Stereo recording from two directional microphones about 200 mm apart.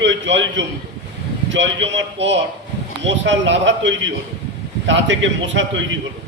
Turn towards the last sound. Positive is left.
turn(degrees=-70)  # may be behind; listen again after turning